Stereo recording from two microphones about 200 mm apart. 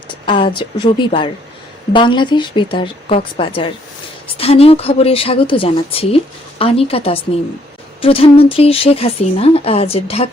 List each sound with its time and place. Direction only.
0.3 s speech: 25° left (ahead or behind)